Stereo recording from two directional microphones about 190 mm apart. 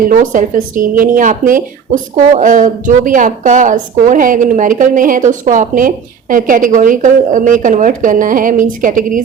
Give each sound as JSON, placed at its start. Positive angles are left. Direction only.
{"t": 0.1, "sound": "a woman's voice", "side_deg": -45}